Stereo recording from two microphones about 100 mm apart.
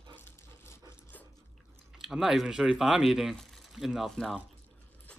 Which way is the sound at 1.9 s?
5° right (ahead or behind).